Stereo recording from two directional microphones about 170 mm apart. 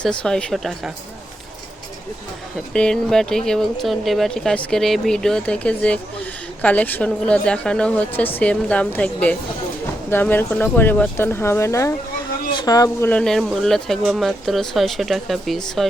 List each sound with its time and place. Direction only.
0.0 s speech: 5° left (ahead or behind)
2.7 s a woman's voice: 5° left (ahead or behind); by 13.1 s 20° left (ahead or behind)
13.1 s speech: 5° left (ahead or behind)